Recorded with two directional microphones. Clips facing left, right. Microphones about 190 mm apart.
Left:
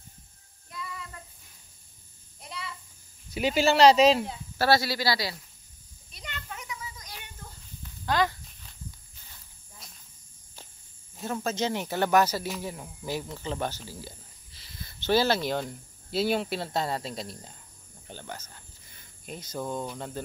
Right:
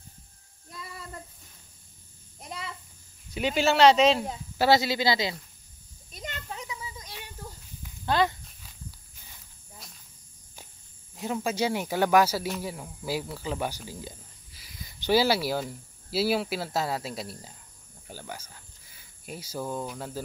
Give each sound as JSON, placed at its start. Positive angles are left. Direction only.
{"t": 0.7, "sound": "child singing", "side_deg": -40}
{"t": 3.3, "sound": "speech", "side_deg": 5}
{"t": 4.6, "sound": "speech", "side_deg": -20}
{"t": 6.1, "sound": "a sound", "side_deg": -45}
{"t": 6.5, "sound": "a sound", "side_deg": -30}
{"t": 7.8, "sound": "walk", "side_deg": -20}
{"t": 11.1, "sound": "speech", "side_deg": -15}